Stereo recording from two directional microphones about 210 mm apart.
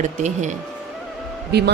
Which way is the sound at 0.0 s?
35° right (ahead or behind).